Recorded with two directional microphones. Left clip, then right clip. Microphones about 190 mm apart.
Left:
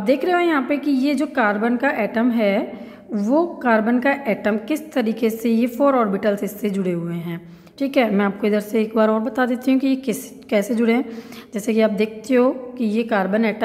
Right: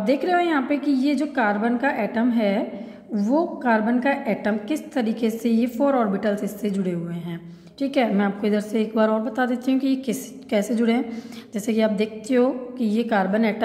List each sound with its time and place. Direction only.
0.0 s a woman's voice: 25° left (ahead or behind)